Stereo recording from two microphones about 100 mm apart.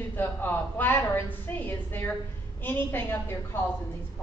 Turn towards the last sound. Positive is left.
turn(degrees=25)  # may be behind; listen again after turning